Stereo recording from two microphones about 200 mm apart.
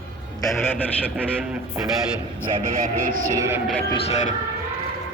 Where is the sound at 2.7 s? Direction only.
45° right (ahead or behind).